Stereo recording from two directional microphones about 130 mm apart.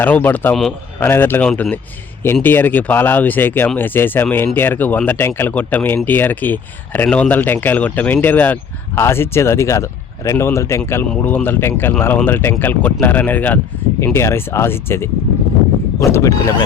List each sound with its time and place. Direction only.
0.0 s speech: 15° left (ahead or behind)